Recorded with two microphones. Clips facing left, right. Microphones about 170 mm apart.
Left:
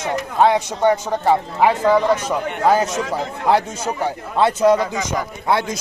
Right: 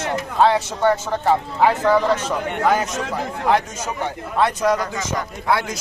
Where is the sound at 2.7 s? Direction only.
30° left (ahead or behind).